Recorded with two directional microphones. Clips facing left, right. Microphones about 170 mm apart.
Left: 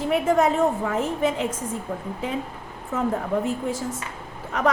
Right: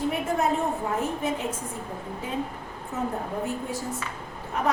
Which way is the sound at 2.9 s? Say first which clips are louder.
Left 5 dB; 90° left.